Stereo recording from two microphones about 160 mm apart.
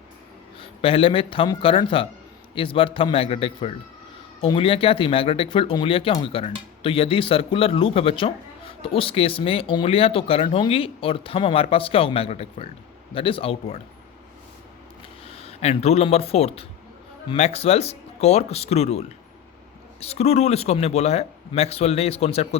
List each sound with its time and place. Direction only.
0.6 s speech: 35° left (ahead or behind)
15.4 s speech: 40° left (ahead or behind)